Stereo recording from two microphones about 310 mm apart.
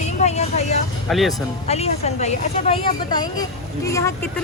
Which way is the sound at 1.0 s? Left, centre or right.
Centre.